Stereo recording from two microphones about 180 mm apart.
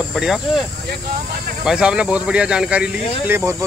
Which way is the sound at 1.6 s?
5° right (ahead or behind).